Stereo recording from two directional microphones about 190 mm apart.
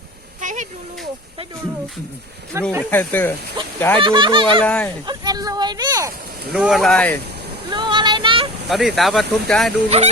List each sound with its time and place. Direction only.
0.4 s a sound: 40° right (ahead or behind)
2.5 s speech: 15° right (ahead or behind)
2.9 s speech: 10° left (ahead or behind)
3.9 s speech: 25° right (ahead or behind)
4.6 s speech: 5° left (ahead or behind)
5.0 s speech: 20° right (ahead or behind)
6.5 s speech: 5° right (ahead or behind)
7.7 s a sound: 25° right (ahead or behind)
8.7 s speech: centre (ahead or behind)
9.9 s speech: 35° right (ahead or behind)